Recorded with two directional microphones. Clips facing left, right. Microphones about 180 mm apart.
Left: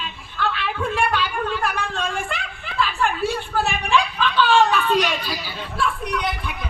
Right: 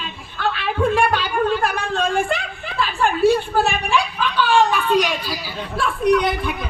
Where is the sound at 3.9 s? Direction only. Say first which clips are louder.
Even; 10° right (ahead or behind).